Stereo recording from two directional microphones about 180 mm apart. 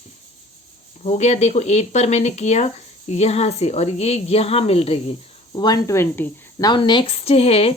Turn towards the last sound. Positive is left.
turn(degrees=35)  # may be behind; listen again after turning